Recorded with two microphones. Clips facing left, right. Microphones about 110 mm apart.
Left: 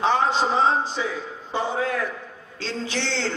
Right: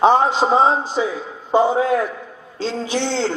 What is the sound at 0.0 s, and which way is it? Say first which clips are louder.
A man's voice: right 6 dB; 20° right (ahead or behind).